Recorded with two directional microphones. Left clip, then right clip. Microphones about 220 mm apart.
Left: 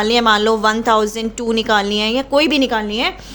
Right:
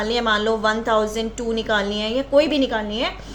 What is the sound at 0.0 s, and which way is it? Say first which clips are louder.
A woman's voice: left 6 dB; 45° left (ahead or behind).